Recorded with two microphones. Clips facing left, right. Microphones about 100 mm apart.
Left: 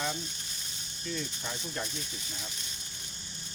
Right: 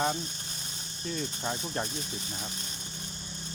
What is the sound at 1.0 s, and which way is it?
Speech, 40° right (ahead or behind).